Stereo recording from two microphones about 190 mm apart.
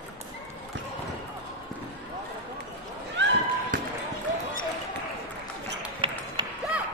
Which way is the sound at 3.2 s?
65° right (ahead or behind).